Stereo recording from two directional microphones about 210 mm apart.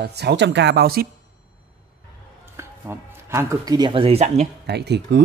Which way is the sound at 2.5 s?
10° right (ahead or behind).